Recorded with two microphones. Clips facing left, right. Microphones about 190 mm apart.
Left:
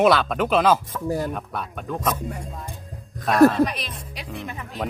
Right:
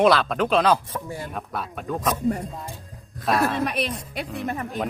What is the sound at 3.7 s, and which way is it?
Speech, 60° right (ahead or behind).